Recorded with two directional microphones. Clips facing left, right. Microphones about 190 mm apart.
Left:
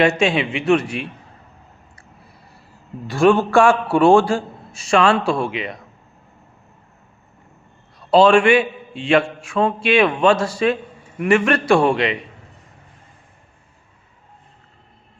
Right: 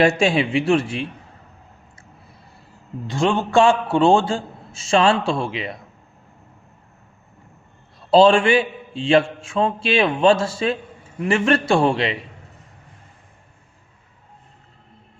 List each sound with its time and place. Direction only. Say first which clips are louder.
0.2 s a man's voice: right 1 dB; 35° right (ahead or behind)
3.1 s a man's voice: left 5 dB; 20° right (ahead or behind)
7.9 s a man's voice: left 1 dB; 30° right (ahead or behind)